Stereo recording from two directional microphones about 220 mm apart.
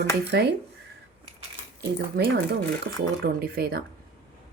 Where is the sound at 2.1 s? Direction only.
50° right (ahead or behind).